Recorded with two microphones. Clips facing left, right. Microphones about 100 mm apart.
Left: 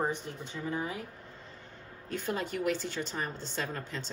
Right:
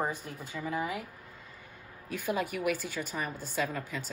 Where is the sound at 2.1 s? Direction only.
10° right (ahead or behind).